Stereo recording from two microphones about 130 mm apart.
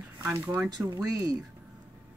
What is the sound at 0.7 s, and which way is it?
Speech, 30° right (ahead or behind).